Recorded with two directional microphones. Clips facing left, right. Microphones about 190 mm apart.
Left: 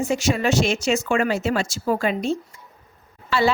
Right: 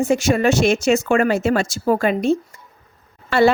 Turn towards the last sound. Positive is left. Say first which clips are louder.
# right 5 dB
turn(degrees=-55)  # may be behind; listen again after turning